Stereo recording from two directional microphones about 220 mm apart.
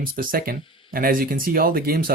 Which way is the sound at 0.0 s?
40° right (ahead or behind).